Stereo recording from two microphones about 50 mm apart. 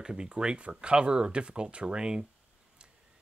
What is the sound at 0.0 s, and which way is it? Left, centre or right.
Speech, centre.